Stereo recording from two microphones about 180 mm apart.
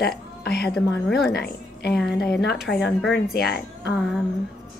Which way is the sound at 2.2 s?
65° left (ahead or behind).